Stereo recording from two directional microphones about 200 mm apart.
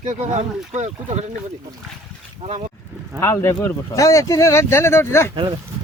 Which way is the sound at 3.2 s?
10° left (ahead or behind).